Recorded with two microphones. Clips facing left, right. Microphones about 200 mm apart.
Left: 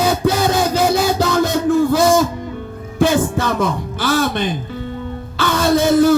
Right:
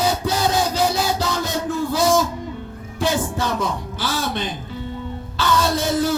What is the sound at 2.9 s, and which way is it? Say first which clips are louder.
Music: left 7 dB; 55° left (ahead or behind).